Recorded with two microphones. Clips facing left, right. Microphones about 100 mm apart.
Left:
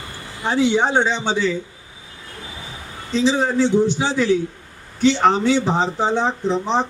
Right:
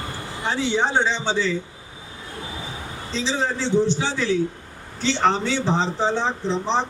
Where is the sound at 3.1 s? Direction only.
15° left (ahead or behind).